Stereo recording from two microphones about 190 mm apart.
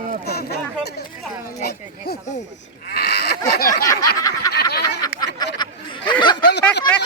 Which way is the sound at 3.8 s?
20° left (ahead or behind).